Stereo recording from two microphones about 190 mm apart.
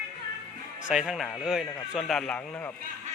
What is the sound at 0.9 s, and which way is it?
A man's voice, 5° right (ahead or behind).